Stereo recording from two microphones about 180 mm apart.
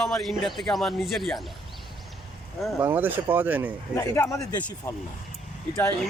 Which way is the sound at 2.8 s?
10° right (ahead or behind).